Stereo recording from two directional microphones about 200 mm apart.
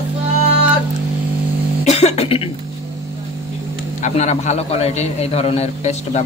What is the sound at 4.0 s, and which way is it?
Speech, 35° left (ahead or behind).